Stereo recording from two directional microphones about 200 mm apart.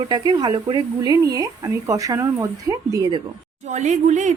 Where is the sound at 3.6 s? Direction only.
35° right (ahead or behind).